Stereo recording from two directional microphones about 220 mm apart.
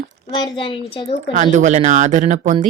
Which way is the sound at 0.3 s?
20° left (ahead or behind).